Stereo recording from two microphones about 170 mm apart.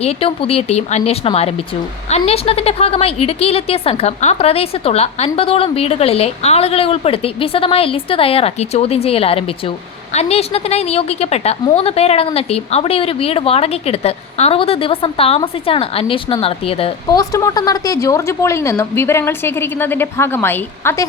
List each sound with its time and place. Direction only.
0.0 s a woman's voice: 35° left (ahead or behind)
17.1 s a woman's voice: 20° left (ahead or behind)